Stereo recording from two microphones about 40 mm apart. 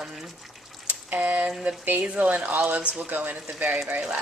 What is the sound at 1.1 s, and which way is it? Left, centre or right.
Speech, right.